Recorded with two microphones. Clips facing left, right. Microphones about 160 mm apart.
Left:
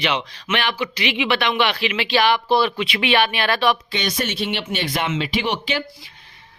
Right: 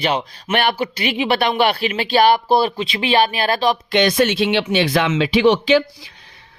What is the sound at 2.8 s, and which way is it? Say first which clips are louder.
Speech: right 2 dB; 35° right (ahead or behind).